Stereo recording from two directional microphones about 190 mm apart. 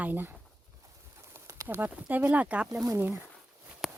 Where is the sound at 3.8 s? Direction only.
Centre (ahead or behind).